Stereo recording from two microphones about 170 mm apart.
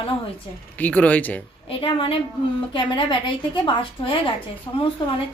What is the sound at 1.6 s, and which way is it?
A woman's voice, 35° left (ahead or behind).